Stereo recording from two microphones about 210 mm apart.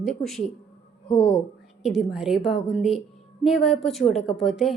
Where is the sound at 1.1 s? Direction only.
35° left (ahead or behind).